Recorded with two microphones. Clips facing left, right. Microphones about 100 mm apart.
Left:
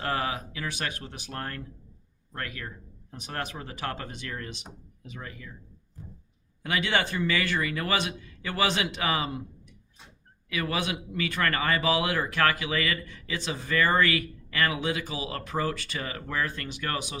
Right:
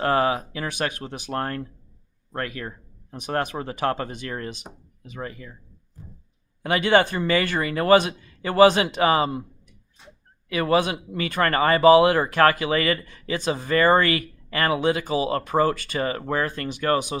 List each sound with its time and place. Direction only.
0.0 s speech: 45° right (ahead or behind)
3.2 s speech: 55° right (ahead or behind); by 5.5 s 40° right (ahead or behind)
6.6 s speech: 45° right (ahead or behind)
10.5 s speech: 40° right (ahead or behind)